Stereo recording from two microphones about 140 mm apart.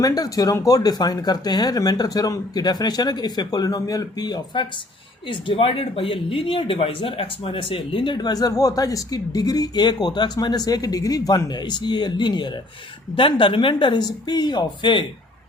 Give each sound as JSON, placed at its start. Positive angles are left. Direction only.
{"t": 0.0, "sound": "speech", "side_deg": 25}